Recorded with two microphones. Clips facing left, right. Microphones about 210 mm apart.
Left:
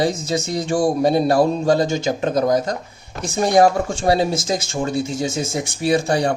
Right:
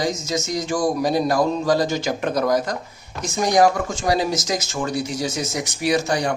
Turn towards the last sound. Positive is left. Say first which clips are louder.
# left 3 dB
turn(degrees=30)  # may be behind; listen again after turning